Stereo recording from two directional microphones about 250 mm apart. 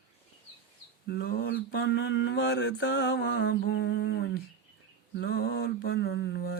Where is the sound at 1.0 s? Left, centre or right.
Left.